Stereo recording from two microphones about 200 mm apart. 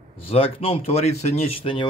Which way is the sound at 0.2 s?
30° left (ahead or behind).